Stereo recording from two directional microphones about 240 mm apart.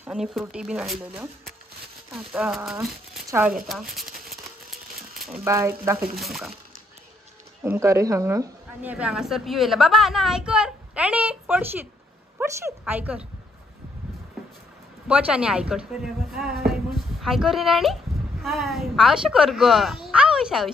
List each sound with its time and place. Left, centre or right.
0.0 s a woman's voice: centre
5.2 s speech: centre
7.6 s a woman's voice: centre
15.0 s a woman's voice: centre